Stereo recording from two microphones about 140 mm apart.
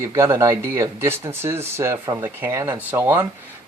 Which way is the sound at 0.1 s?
25° right (ahead or behind).